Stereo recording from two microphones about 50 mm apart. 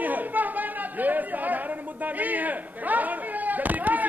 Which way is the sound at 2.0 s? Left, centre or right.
Right.